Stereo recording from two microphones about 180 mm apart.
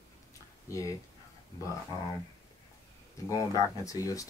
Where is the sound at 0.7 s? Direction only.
20° left (ahead or behind).